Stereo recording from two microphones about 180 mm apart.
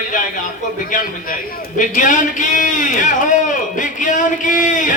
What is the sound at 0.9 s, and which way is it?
Speech, 45° left (ahead or behind).